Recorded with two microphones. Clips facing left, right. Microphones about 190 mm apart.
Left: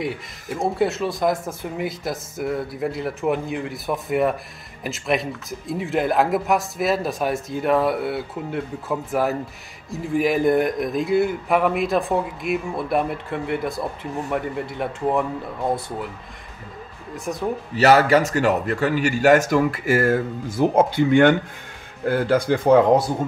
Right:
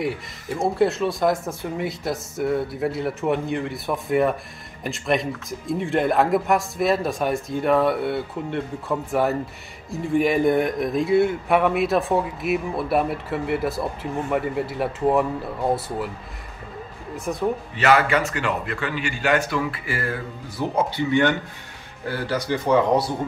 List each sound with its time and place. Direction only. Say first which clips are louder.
0.0 s speech: right 1 dB; centre (ahead or behind)
17.2 s speech: right 1 dB; centre (ahead or behind)
17.7 s speech: left 5 dB; 40° left (ahead or behind)